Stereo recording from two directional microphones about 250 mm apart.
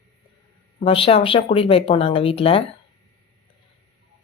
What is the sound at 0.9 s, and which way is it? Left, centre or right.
Speech, left.